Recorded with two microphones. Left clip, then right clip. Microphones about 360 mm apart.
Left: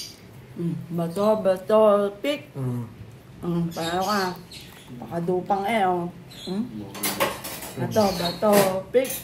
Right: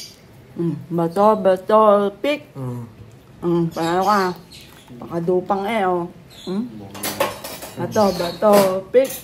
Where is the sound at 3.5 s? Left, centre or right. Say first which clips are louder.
Right 8 dB; right.